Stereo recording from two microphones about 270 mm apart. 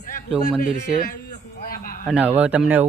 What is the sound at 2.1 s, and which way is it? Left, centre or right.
Speech, centre.